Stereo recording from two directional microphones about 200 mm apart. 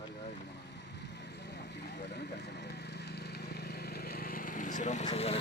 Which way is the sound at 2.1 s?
55° left (ahead or behind).